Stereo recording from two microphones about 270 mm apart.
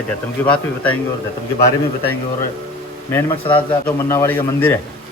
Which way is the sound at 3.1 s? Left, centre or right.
Centre.